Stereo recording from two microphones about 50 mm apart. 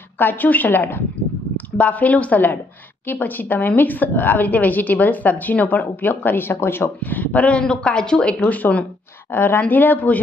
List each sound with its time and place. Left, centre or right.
0.2 s a woman's voice: left
1.8 s a woman's voice: left
7.0 s a woman's voice: left
7.6 s speech: centre
8.4 s a woman's voice: left
9.3 s a woman's voice: left